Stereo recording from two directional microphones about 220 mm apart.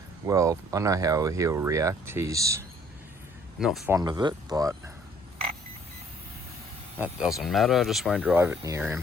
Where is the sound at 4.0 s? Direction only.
20° right (ahead or behind).